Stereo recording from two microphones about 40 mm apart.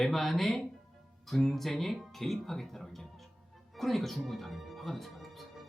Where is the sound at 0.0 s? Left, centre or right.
Centre.